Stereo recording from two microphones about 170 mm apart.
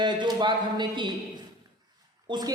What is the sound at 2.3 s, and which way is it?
Speech, 25° right (ahead or behind).